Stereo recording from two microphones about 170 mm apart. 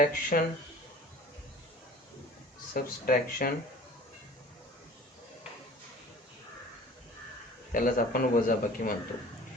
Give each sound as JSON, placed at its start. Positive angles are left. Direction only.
{"t": 0.0, "sound": "a man's voice", "side_deg": 55}
{"t": 2.7, "sound": "speech", "side_deg": 55}
{"t": 7.7, "sound": "a man's voice", "side_deg": 55}